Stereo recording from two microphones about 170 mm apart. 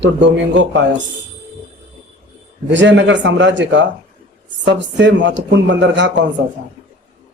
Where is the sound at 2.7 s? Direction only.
90° right.